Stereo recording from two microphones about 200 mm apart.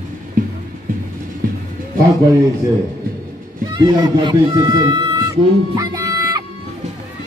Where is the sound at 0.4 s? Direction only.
45° right (ahead or behind).